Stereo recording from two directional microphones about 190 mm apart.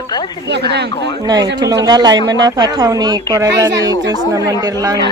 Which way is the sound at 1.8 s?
20° right (ahead or behind).